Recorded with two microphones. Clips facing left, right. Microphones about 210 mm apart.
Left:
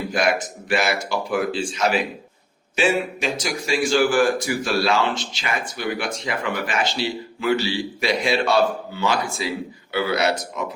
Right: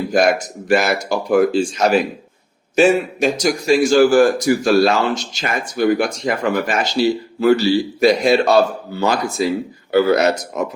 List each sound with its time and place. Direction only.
0.1 s a man's voice: 40° right (ahead or behind)